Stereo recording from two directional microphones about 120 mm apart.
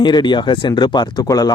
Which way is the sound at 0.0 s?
40° left (ahead or behind).